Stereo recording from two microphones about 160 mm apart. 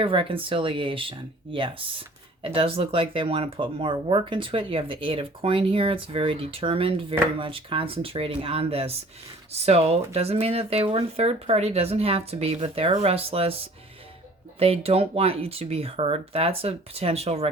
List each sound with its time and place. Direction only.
0.0 s speech: 35° right (ahead or behind)
14.6 s speech: 35° right (ahead or behind)